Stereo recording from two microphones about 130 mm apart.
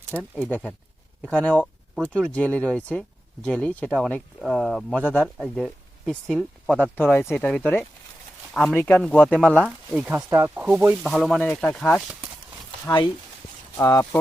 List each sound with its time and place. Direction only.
0.2 s speech: 5° left (ahead or behind)
9.6 s speech: 5° right (ahead or behind)
10.2 s speech: 25° right (ahead or behind)
10.5 s speech: 10° right (ahead or behind)
11.0 s speech: centre (ahead or behind)
12.8 s speech: 35° left (ahead or behind)
13.7 s speech: 20° left (ahead or behind)